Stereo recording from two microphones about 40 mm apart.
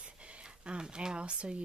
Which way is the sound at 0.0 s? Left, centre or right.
Right.